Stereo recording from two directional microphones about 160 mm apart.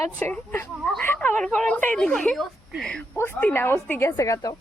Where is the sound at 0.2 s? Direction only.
15° left (ahead or behind).